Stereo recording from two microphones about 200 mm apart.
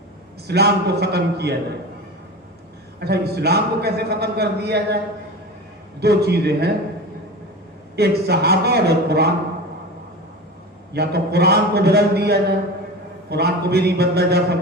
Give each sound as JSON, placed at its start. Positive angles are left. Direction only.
{"t": 0.4, "sound": "a man's voice", "side_deg": -55}
{"t": 3.0, "sound": "a man's voice", "side_deg": -55}
{"t": 6.0, "sound": "a man's voice", "side_deg": -55}
{"t": 7.9, "sound": "a man's voice", "side_deg": -55}
{"t": 10.9, "sound": "a man's voice", "side_deg": -55}